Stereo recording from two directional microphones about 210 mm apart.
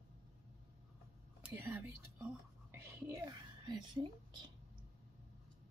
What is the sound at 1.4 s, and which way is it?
Speech, 10° right (ahead or behind).